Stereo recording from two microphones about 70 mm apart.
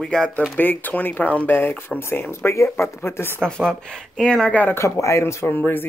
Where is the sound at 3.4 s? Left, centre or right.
Centre.